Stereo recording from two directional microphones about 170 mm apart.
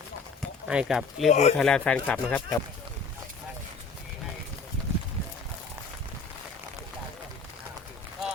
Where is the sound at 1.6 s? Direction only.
5° left (ahead or behind).